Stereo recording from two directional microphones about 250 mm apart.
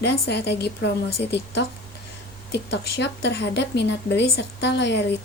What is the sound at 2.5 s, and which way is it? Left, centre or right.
A woman's voice, left.